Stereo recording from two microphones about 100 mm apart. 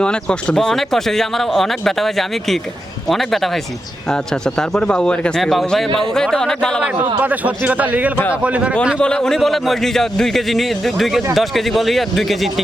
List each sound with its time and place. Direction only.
0.0 s speech: 10° left (ahead or behind)
7.2 s speech: 15° right (ahead or behind)
9.0 s speech: 5° left (ahead or behind)